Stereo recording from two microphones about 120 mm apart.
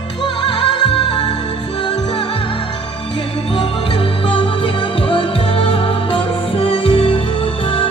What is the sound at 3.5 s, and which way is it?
Music, 45° left (ahead or behind).